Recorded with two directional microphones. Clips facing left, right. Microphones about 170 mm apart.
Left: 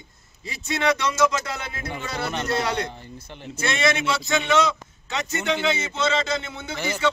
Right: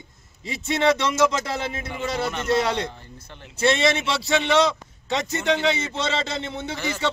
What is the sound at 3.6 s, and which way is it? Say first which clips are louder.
Speech: right 3 dB; 30° right (ahead or behind).